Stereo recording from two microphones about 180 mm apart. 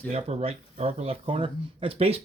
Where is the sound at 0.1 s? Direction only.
35° right (ahead or behind).